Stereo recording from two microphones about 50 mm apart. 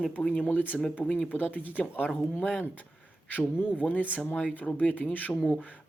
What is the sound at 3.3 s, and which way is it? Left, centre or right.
Speech, left.